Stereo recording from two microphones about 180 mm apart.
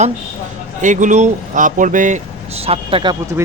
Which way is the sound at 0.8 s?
45° right (ahead or behind).